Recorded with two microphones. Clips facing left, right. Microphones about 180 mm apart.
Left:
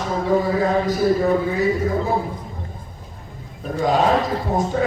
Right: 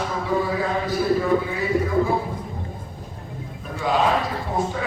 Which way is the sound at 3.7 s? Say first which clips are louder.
Left 4 dB; 45° left (ahead or behind).